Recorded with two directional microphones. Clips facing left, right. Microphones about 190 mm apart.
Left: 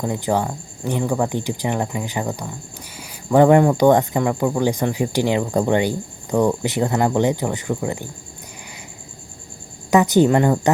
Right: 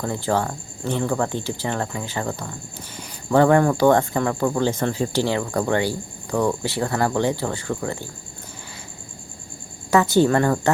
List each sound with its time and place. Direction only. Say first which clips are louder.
0.0 s speech: left 2 dB; 15° left (ahead or behind)
9.9 s speech: left 2 dB; 20° left (ahead or behind)